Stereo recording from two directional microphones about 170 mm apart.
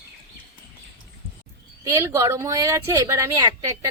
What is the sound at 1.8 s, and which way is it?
Speech, 20° right (ahead or behind).